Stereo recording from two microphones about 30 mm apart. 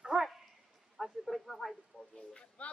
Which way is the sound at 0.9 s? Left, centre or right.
Centre.